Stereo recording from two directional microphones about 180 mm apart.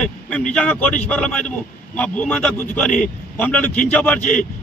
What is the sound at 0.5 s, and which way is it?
A man's voice, 5° left (ahead or behind).